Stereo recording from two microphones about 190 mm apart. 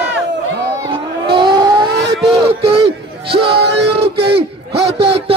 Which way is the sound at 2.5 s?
30° right (ahead or behind).